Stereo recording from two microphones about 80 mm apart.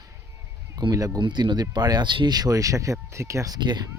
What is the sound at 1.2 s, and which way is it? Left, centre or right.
Speech, right.